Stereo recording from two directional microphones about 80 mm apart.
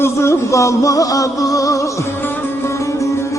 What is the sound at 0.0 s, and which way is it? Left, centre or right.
Music, left.